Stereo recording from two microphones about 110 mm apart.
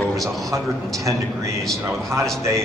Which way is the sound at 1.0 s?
30° right (ahead or behind).